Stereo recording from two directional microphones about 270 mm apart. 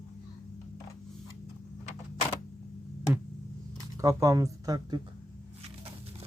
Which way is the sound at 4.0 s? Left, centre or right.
Centre.